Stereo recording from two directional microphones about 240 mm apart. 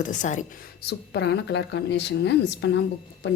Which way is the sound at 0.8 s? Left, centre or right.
Left.